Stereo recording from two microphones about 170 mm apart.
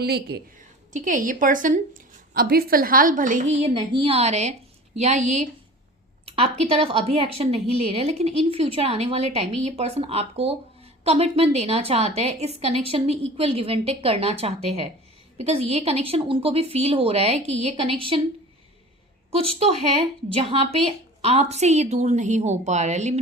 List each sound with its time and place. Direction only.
0.0 s a woman's voice: 70° right (ahead or behind)
0.9 s a woman's voice: 50° right (ahead or behind); by 18.2 s 35° right (ahead or behind)
19.3 s a woman's voice: 35° right (ahead or behind)